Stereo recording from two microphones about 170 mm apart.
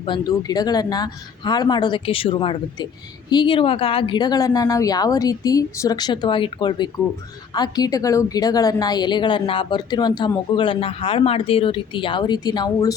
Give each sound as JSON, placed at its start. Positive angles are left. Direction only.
{"t": 0.0, "sound": "a woman's voice", "side_deg": 25}